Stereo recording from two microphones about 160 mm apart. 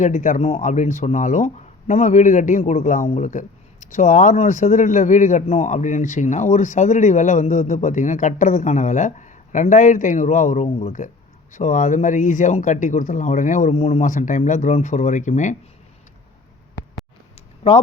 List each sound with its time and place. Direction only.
0.0 s speech: 50° left (ahead or behind)